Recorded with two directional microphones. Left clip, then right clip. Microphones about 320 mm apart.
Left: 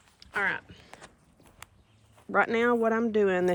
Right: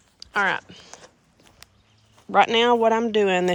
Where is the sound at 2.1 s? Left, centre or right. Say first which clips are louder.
Right 8 dB; centre.